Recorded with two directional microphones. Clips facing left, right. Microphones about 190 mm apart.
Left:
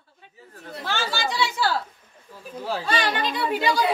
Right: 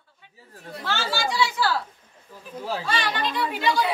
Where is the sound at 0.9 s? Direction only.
20° left (ahead or behind).